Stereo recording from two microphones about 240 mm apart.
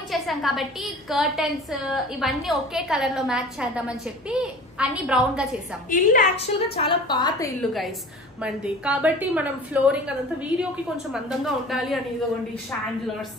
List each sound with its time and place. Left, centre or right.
0.1 s a woman's voice: centre
5.9 s a woman's voice: left
6.7 s a woman's voice: left
8.4 s a woman's voice: centre